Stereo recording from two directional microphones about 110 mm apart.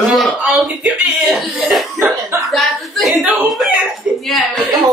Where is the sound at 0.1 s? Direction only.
Centre (ahead or behind).